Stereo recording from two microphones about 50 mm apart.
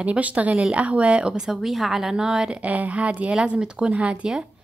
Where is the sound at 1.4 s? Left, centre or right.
Centre.